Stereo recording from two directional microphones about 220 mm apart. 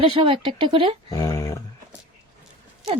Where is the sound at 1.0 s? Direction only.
15° left (ahead or behind).